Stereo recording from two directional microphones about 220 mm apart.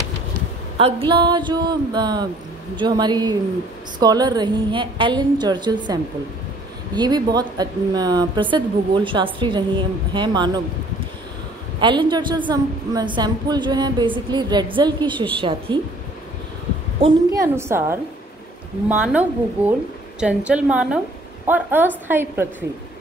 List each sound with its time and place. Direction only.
0.7 s speech: 25° right (ahead or behind)
7.0 s speech: 20° right (ahead or behind)
11.8 s speech: 20° right (ahead or behind)
17.0 s a woman's voice: 15° right (ahead or behind)